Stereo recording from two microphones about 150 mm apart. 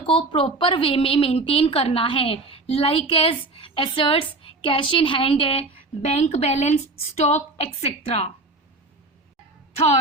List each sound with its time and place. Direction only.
0.0 s a woman's voice: 40° left (ahead or behind)